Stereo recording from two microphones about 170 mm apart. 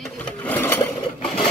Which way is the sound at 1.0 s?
30° left (ahead or behind).